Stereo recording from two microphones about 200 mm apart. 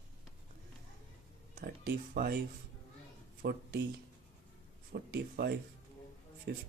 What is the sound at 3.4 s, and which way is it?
Speech, 50° right (ahead or behind).